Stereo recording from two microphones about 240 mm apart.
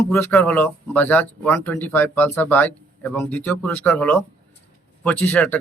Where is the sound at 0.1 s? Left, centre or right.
Centre.